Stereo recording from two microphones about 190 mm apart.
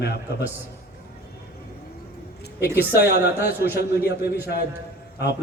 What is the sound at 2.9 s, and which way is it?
A woman's voice, 55° left (ahead or behind).